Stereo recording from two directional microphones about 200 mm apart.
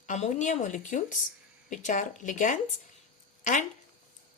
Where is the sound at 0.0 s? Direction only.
35° left (ahead or behind).